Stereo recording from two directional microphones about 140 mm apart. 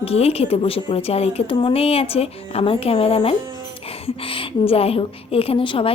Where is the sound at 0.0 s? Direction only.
45° left (ahead or behind).